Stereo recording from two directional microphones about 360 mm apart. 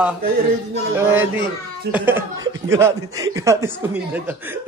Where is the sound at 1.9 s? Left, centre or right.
Right.